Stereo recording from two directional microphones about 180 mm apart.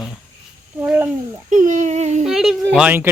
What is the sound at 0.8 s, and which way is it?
Speech, 10° right (ahead or behind).